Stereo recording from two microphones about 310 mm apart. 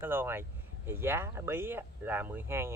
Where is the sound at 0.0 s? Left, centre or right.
Centre.